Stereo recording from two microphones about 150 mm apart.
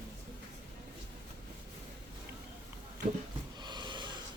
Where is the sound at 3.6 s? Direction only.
30° right (ahead or behind).